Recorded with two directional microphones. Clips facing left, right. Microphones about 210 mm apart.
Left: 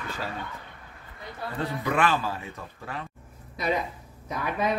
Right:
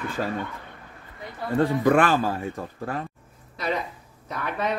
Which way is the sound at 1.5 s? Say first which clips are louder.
Right 9 dB; 50° right (ahead or behind).